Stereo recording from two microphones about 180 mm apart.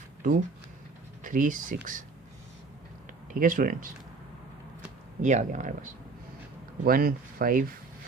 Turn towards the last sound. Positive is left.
turn(degrees=-55)  # may be behind; listen again after turning